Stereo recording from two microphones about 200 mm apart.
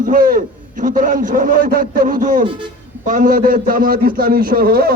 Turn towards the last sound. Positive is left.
turn(degrees=-50)  # may be behind; listen again after turning